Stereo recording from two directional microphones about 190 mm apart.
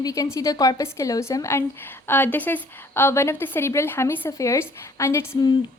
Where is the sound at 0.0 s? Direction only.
20° left (ahead or behind).